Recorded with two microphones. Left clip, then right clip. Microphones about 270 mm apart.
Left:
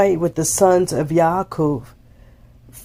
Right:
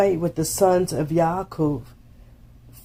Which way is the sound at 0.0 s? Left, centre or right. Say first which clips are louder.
Left 4 dB; left.